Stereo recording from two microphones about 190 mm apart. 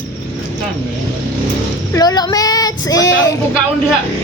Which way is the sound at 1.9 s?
20° left (ahead or behind).